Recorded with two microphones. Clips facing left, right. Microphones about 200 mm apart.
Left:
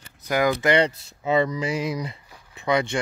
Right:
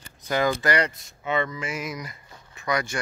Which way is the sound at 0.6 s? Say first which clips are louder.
Left 4 dB; 30° left (ahead or behind).